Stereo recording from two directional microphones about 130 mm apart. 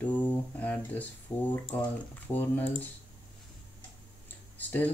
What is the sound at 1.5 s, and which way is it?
Speech, 15° left (ahead or behind).